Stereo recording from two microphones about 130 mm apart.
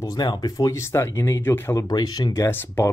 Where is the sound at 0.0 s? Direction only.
30° left (ahead or behind).